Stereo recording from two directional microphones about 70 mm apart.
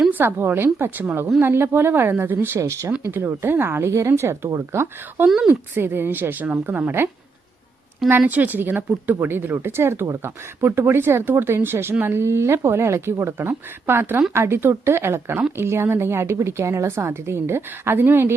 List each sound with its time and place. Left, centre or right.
0.1 s a woman's voice: right
2.6 s a woman's voice: right
8.3 s a woman's voice: right